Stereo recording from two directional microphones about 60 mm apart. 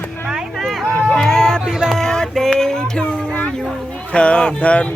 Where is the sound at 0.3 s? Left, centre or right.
Centre.